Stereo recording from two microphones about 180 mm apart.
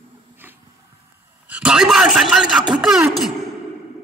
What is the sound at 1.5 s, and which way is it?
A man's voice, 5° right (ahead or behind).